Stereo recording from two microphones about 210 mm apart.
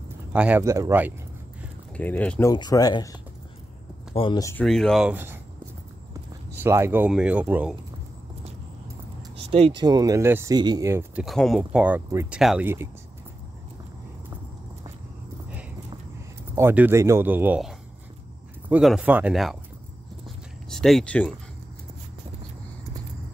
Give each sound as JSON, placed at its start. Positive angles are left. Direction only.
{"t": 0.3, "sound": "speech", "side_deg": -5}
{"t": 2.0, "sound": "speech", "side_deg": 5}
{"t": 2.5, "sound": "speech", "side_deg": 20}
{"t": 4.6, "sound": "speech", "side_deg": 0}
{"t": 6.6, "sound": "speech", "side_deg": -10}
{"t": 9.5, "sound": "speech", "side_deg": -25}
{"t": 11.2, "sound": "speech", "side_deg": 0}
{"t": 16.5, "sound": "speech", "side_deg": -10}
{"t": 20.7, "sound": "speech", "side_deg": 0}